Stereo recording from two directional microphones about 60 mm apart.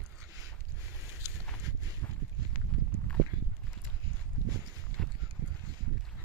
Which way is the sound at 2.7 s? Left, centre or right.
Centre.